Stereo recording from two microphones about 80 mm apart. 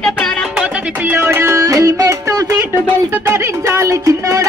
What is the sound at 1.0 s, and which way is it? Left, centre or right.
Music, right.